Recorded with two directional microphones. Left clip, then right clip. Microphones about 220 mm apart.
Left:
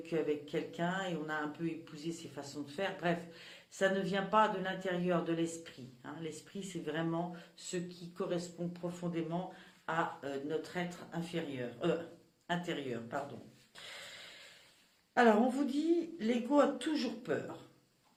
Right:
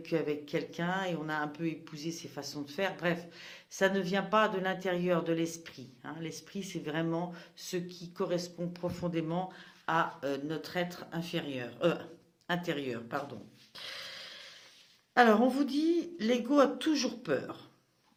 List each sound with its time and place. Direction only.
0.0 s speech: 40° right (ahead or behind)
15.1 s speech: 40° right (ahead or behind)